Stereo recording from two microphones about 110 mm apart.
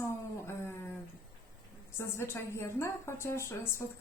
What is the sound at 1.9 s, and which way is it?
A woman's voice, 25° left (ahead or behind).